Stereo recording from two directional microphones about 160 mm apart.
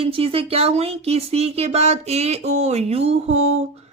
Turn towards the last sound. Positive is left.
turn(degrees=-45)  # may be behind; listen again after turning